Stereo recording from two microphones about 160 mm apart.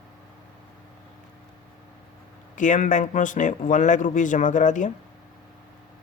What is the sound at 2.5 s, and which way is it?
Speech, 50° left (ahead or behind).